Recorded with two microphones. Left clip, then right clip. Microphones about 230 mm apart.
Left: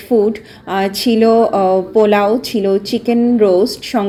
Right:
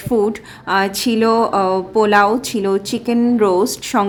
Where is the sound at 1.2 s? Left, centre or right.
Centre.